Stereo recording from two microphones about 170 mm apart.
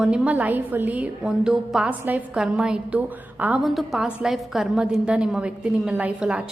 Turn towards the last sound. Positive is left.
turn(degrees=-5)  # may be behind; listen again after turning